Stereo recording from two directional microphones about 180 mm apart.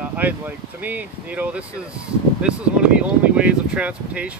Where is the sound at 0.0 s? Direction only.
10° right (ahead or behind).